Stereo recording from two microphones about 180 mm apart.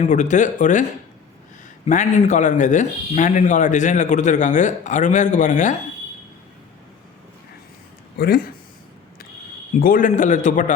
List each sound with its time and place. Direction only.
0.0 s speech: 40° left (ahead or behind)
1.9 s speech: 45° left (ahead or behind)
8.2 s speech: 55° left (ahead or behind)
9.8 s speech: 50° left (ahead or behind)